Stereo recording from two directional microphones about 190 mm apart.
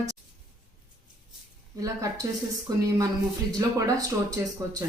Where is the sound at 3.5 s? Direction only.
20° right (ahead or behind).